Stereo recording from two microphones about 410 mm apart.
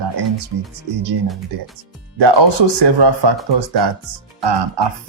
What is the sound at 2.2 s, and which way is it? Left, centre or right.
Speech, right.